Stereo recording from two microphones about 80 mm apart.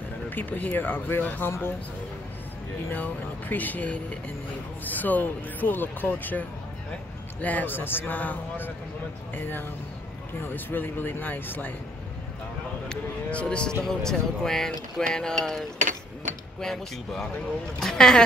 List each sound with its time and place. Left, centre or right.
0.3 s speech: left
2.9 s speech: left
7.4 s speech: left
12.8 s speech: centre